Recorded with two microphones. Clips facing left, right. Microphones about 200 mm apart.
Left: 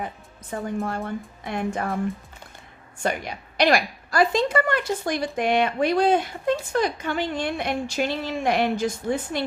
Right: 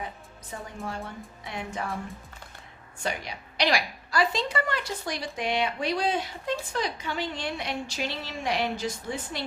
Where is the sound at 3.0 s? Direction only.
50° left (ahead or behind).